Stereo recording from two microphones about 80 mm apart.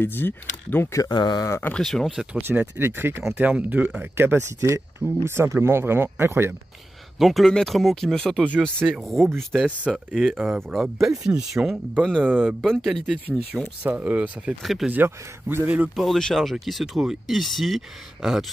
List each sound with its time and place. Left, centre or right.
0.0 s speech: left
1.0 s speech: left
1.8 s speech: centre
2.3 s speech: right
3.3 s speech: centre
4.3 s speech: right
7.2 s speech: centre
11.9 s speech: centre
13.5 s speech: centre
14.6 s speech: centre
14.9 s speech: right
16.0 s speech: centre